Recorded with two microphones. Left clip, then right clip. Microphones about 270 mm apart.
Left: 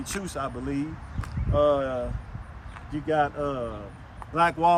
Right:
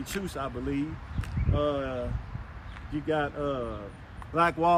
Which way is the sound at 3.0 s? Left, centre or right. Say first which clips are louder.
Left 4 dB; left.